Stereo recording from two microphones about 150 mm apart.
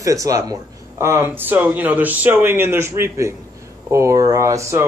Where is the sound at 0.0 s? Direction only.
20° right (ahead or behind).